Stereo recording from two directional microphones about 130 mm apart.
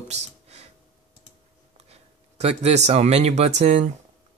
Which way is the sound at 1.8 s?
55° right (ahead or behind).